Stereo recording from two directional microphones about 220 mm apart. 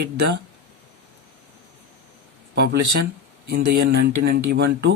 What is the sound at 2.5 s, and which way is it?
Speech, 50° right (ahead or behind).